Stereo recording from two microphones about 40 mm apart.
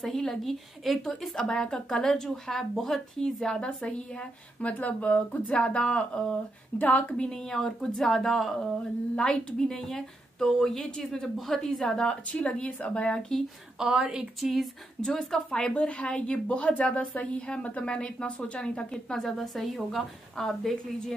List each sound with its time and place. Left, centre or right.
0.0 s a woman's voice: centre
3.2 s a woman's voice: left
6.8 s speech: left
7.2 s a woman's voice: centre
9.1 s a woman's voice: left
12.3 s a woman's voice: left
13.7 s a woman's voice: centre
14.4 s a woman's voice: centre
15.0 s a woman's voice: left
19.2 s a woman's voice: centre
20.3 s a woman's voice: centre